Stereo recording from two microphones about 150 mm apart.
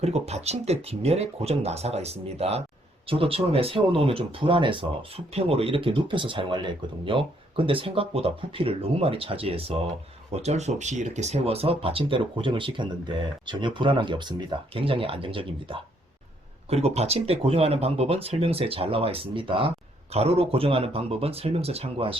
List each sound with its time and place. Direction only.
0.0 s speech: 45° right (ahead or behind)